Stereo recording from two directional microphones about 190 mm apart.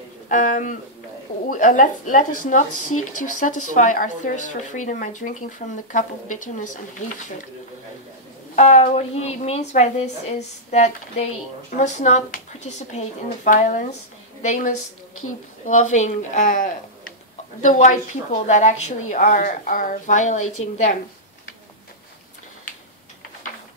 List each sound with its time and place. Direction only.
0.3 s speech: 40° left (ahead or behind)
8.5 s speech: 35° left (ahead or behind)